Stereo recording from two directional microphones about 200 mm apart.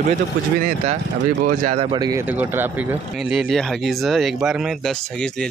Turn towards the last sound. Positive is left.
turn(degrees=0)  # may be behind; listen again after turning